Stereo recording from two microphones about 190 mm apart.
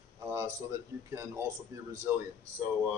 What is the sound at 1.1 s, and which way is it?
Speech, 15° right (ahead or behind).